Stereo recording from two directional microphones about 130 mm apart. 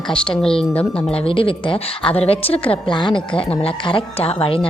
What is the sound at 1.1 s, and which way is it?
A woman's voice, 45° left (ahead or behind).